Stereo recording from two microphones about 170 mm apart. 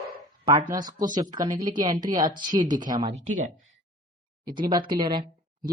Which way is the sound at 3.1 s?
45° right (ahead or behind).